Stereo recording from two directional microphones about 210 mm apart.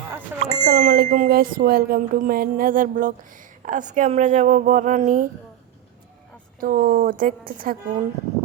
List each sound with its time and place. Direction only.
0.4 s speech: 40° right (ahead or behind)
6.6 s a woman's voice: 45° right (ahead or behind)